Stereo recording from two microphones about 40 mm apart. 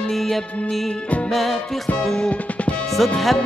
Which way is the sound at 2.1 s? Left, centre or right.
Left.